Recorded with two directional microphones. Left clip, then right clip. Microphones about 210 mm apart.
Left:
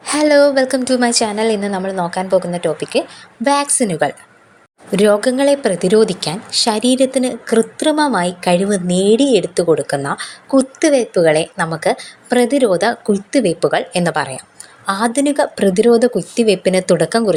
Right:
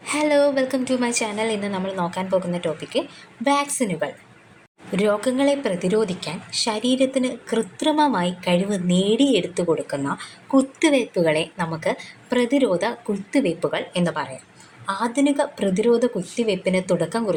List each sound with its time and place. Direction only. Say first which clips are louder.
0.0 s a woman's voice: left 7 dB; 15° left (ahead or behind)